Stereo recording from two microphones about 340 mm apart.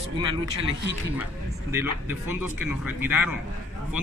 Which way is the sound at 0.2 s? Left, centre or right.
Centre.